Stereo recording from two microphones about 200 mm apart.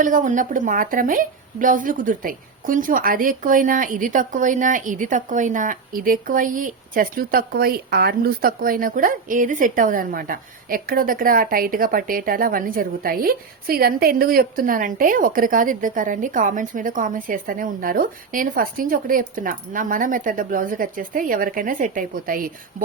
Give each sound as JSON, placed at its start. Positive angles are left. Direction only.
{"t": 0.0, "sound": "a woman's voice", "side_deg": -40}